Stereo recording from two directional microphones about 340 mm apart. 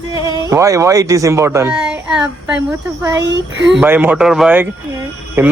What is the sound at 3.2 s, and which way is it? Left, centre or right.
Speech, right.